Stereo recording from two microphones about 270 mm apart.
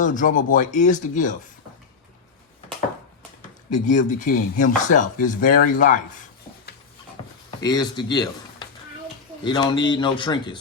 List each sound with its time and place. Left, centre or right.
0.0 s speech: left
3.8 s speech: left
7.6 s speech: centre